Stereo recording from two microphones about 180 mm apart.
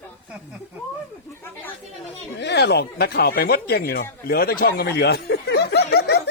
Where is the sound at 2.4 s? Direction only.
70° left (ahead or behind).